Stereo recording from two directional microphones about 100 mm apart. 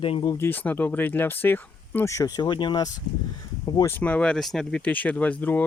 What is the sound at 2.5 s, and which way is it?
Speech, 50° left (ahead or behind).